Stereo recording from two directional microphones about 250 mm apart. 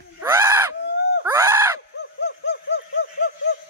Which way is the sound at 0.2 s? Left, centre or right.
Centre.